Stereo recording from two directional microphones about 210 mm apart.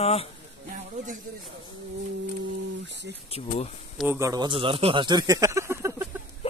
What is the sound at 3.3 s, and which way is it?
Speech, 30° left (ahead or behind).